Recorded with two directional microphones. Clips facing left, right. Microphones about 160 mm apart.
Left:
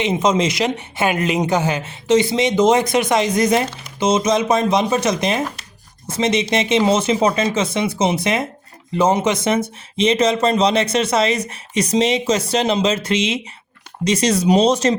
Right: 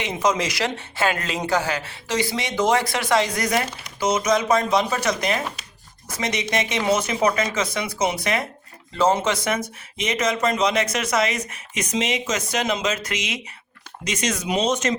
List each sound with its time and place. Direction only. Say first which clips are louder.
0.0 s speech: left 5 dB; 25° left (ahead or behind)